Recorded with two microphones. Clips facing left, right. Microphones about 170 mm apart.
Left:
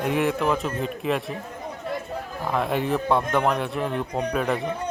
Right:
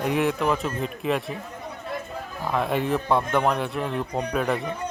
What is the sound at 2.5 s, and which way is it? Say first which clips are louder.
Speech: even; centre (ahead or behind).